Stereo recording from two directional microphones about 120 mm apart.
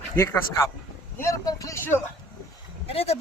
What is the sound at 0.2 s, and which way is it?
Speech, 20° left (ahead or behind).